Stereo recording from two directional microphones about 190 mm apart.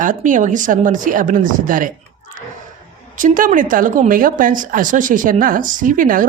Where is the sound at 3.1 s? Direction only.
45° right (ahead or behind).